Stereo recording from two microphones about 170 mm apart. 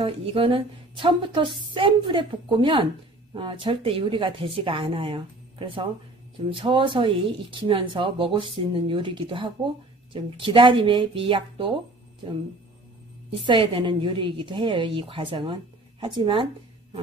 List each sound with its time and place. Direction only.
0.0 s a woman's voice: 30° right (ahead or behind)
13.3 s a woman's voice: 30° right (ahead or behind)